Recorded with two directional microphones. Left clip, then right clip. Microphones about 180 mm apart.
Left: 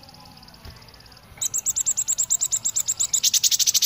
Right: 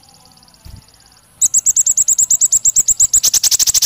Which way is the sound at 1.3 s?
15° right (ahead or behind).